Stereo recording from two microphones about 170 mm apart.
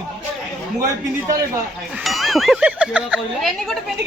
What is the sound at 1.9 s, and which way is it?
Speech, centre (ahead or behind).